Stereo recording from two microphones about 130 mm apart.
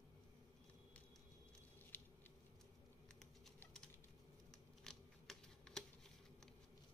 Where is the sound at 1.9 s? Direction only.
15° left (ahead or behind).